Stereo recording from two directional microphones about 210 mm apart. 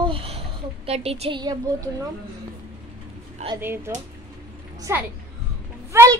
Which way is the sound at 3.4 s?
35° right (ahead or behind).